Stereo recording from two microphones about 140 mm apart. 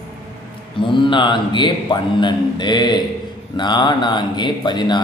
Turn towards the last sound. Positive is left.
turn(degrees=30)  # may be behind; listen again after turning